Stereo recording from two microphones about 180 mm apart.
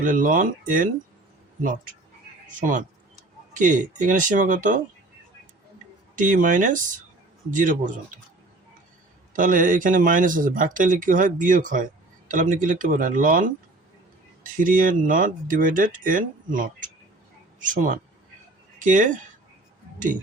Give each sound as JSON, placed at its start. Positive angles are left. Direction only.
{"t": 0.0, "sound": "speech", "side_deg": -45}
{"t": 2.5, "sound": "speech", "side_deg": -45}
{"t": 6.1, "sound": "speech", "side_deg": -45}
{"t": 9.3, "sound": "speech", "side_deg": -50}
{"t": 14.5, "sound": "speech", "side_deg": -50}